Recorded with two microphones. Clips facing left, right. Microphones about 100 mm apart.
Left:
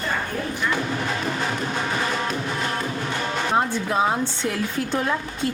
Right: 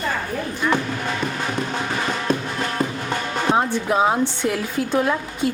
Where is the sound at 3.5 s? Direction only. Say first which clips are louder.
Right 3 dB; 15° right (ahead or behind).